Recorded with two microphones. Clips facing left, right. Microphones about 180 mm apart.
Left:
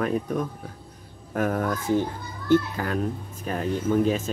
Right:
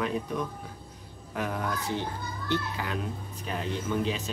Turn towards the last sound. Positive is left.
turn(degrees=45)  # may be behind; listen again after turning